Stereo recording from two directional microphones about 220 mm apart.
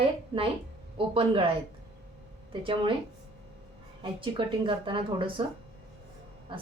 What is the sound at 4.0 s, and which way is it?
A woman's voice, 25° right (ahead or behind).